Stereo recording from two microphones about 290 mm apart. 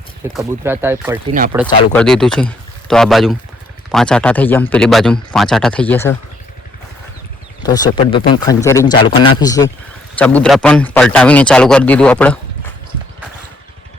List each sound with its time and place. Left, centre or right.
0.3 s speech: centre
1.8 s a man's voice: centre
7.6 s a man's voice: centre